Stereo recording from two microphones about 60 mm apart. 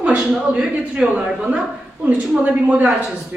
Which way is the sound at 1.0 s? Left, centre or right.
Centre.